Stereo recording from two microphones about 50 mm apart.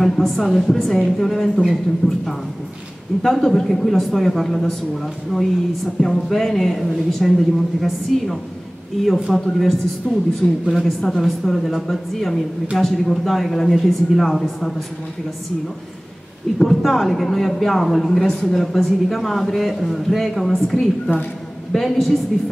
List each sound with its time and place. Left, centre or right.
0.0 s a man's voice: centre
10.0 s speech: right
10.6 s a man's voice: centre
16.5 s speech: centre